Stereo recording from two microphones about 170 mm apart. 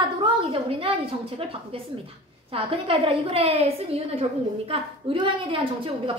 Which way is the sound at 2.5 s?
30° right (ahead or behind).